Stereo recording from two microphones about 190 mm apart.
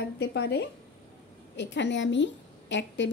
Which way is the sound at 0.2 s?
60° left (ahead or behind).